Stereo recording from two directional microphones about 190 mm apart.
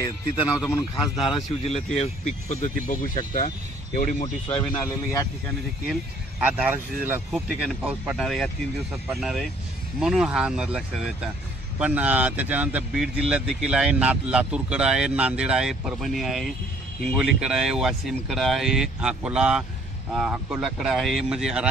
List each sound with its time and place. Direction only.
0.7 s speech: 25° left (ahead or behind); by 4.3 s 40° left (ahead or behind)
4.5 s speech: 30° left (ahead or behind)
6.4 s speech: 5° right (ahead or behind)
11.8 s speech: 10° right (ahead or behind)